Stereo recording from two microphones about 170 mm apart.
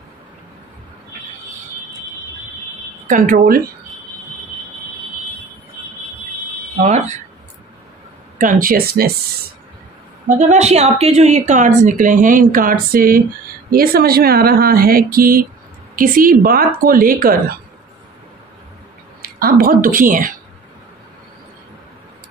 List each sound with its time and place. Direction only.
3.1 s a woman's voice: 50° right (ahead or behind)
6.8 s a woman's voice: 40° right (ahead or behind)
8.4 s speech: 55° right (ahead or behind)
10.2 s a woman's voice: 40° right (ahead or behind)
19.2 s a woman's voice: 60° right (ahead or behind)